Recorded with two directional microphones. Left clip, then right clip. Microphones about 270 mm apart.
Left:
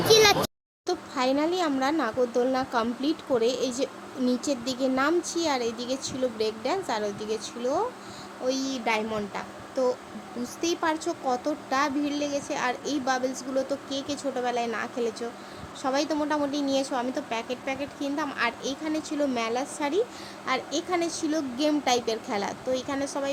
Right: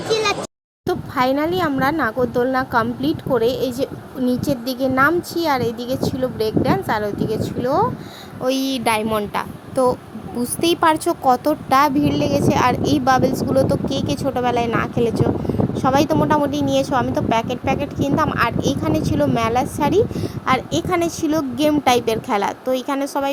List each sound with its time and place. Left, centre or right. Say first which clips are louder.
0.1 s a sound: left 1 dB; centre
0.9 s a woman's voice: right 8 dB; centre
16.5 s a woman's voice: right 7 dB; centre
16.7 s a woman's voice: right 9 dB; centre